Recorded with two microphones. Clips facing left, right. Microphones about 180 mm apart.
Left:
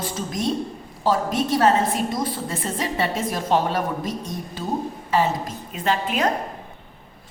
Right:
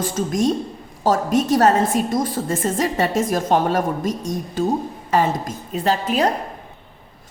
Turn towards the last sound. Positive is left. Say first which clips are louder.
# right 3 dB
turn(degrees=-35)  # may be behind; listen again after turning